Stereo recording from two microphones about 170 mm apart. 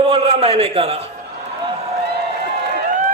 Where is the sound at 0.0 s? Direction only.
35° right (ahead or behind).